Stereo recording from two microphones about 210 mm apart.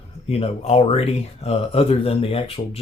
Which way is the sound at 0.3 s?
30° left (ahead or behind).